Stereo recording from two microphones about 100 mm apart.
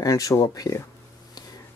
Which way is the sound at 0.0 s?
35° left (ahead or behind).